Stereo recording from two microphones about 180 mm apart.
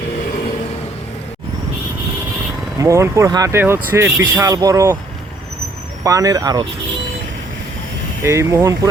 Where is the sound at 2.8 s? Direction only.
15° right (ahead or behind).